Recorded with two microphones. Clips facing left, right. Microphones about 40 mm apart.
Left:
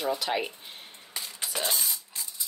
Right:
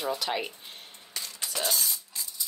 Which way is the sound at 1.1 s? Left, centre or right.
Centre.